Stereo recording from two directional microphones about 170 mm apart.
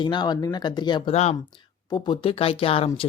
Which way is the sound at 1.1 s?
40° left (ahead or behind).